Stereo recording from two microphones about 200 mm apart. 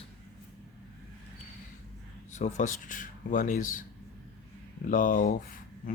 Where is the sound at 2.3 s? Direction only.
35° left (ahead or behind).